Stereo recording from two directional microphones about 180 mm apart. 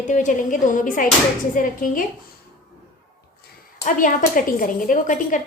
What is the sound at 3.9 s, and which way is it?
A woman's voice, 45° left (ahead or behind).